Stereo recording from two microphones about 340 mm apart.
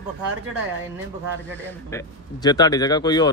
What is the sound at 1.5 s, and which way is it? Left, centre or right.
Speech, centre.